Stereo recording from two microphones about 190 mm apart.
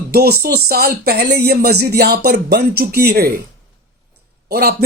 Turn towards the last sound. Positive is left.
turn(degrees=-55)  # may be behind; listen again after turning